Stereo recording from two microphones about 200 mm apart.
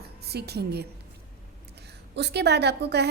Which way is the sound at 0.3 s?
55° right (ahead or behind).